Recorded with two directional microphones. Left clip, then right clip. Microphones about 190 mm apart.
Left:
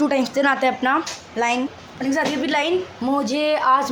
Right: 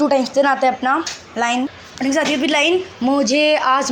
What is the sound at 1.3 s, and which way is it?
A woman's voice, 10° right (ahead or behind).